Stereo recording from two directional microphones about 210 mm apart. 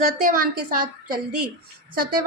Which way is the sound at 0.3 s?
45° right (ahead or behind).